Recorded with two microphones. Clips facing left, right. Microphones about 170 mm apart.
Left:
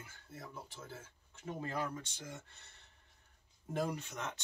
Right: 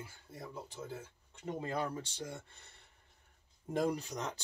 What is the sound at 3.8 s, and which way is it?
Speech, 35° right (ahead or behind).